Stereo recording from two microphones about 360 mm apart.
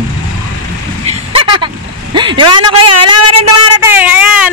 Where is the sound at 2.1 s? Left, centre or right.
Centre.